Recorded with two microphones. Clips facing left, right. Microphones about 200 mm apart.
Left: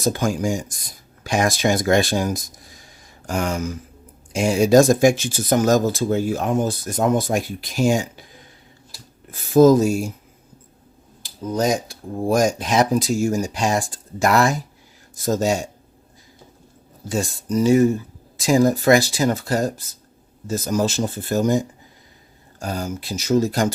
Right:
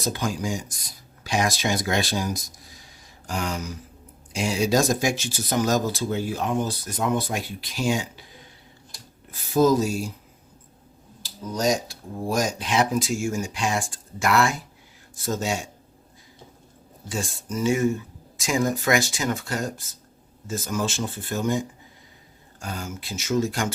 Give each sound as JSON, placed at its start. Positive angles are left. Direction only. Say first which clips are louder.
{"t": 0.0, "sound": "speech", "louder": "left 6 dB", "side_deg": 50}
{"t": 9.5, "sound": "speech", "louder": "left 7 dB", "side_deg": 50}
{"t": 11.5, "sound": "speech", "louder": "left 3 dB", "side_deg": 55}
{"t": 17.1, "sound": "speech", "louder": "left 7 dB", "side_deg": 40}
{"t": 22.6, "sound": "speech", "louder": "left 7 dB", "side_deg": 40}